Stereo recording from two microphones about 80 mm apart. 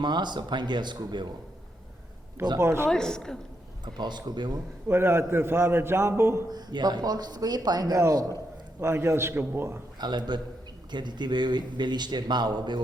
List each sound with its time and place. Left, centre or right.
0.0 s speech: right
2.6 s a man's voice: right
2.9 s a woman's voice: centre
3.8 s speech: right
4.9 s a man's voice: right
6.5 s speech: right
8.8 s a man's voice: right
10.0 s speech: right